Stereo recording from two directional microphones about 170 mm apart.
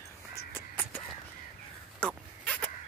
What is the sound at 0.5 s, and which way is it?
Crow, 10° left (ahead or behind).